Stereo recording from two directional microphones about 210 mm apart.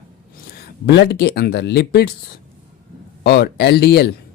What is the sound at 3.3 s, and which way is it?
Speech, 50° left (ahead or behind).